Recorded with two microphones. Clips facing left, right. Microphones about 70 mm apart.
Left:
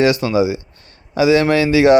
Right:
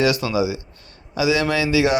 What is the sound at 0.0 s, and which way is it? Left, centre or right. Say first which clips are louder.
A man's voice: left 5 dB; left.